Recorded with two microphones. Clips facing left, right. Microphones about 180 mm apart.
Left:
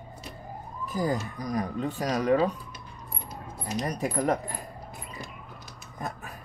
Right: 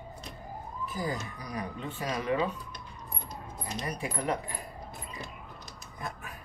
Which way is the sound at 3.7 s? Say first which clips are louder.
Left 7 dB; 40° left (ahead or behind).